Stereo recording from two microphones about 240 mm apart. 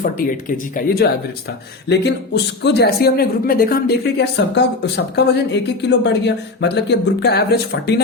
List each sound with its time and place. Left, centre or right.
0.4 s speech: left